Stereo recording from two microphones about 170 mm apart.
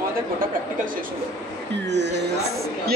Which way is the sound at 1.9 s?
90° right.